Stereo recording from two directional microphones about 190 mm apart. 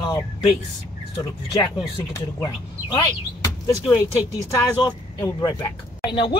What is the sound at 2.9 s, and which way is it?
Speech, 20° left (ahead or behind).